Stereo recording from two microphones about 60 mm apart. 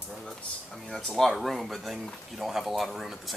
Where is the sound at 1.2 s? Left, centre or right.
Centre.